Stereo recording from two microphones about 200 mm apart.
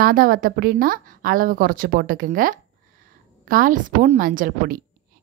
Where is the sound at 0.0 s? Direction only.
45° right (ahead or behind).